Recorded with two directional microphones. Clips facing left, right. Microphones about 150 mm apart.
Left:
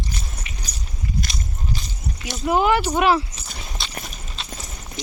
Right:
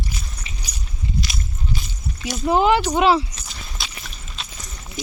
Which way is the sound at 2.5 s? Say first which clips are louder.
Right 2 dB; 20° right (ahead or behind).